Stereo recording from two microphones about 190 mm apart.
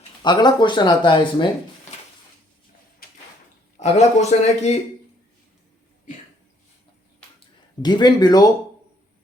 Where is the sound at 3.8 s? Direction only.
35° left (ahead or behind).